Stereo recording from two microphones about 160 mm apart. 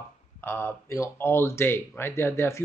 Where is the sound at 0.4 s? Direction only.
15° left (ahead or behind).